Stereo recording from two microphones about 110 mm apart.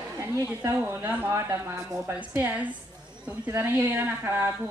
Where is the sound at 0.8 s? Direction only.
20° right (ahead or behind).